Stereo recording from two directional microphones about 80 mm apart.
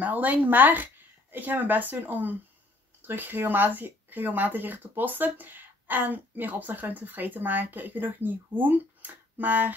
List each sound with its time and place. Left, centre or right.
0.0 s speech: right